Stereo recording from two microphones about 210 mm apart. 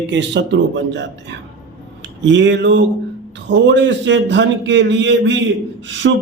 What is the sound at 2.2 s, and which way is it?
Speech, 60° right (ahead or behind).